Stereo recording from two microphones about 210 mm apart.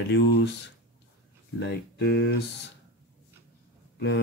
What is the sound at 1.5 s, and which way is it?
Speech, 50° left (ahead or behind).